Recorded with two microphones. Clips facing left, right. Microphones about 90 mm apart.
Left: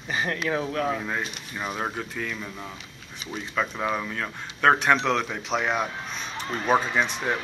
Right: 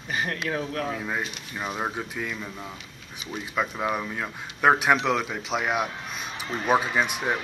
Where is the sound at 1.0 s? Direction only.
5° right (ahead or behind).